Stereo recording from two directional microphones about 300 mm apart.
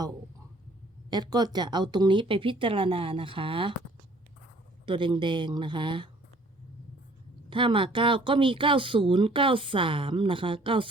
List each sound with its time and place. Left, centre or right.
1.1 s speech: centre
4.9 s speech: centre
7.5 s speech: centre